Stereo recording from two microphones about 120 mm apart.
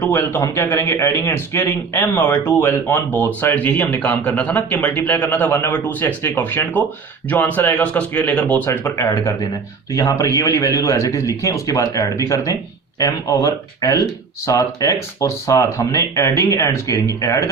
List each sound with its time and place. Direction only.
0.0 s speech: 20° left (ahead or behind)